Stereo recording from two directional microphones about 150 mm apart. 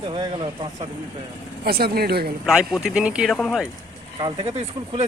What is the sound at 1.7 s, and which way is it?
Speech, 90° right.